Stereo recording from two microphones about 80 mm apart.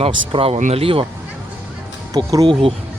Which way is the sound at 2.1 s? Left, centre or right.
Right.